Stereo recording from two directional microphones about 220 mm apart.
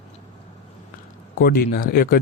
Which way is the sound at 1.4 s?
45° left (ahead or behind).